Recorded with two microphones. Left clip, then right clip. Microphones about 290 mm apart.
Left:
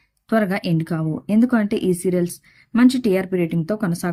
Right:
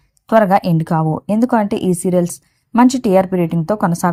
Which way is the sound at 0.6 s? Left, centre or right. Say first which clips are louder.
Right 7 dB; centre.